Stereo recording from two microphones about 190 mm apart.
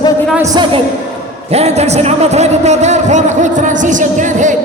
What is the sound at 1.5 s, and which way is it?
A man's voice, 35° right (ahead or behind).